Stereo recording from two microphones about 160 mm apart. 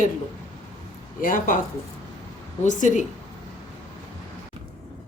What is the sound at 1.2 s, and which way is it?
Speech, 55° left (ahead or behind).